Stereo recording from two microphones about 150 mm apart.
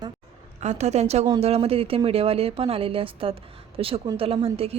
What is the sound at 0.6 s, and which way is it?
A woman's voice, 50° right (ahead or behind).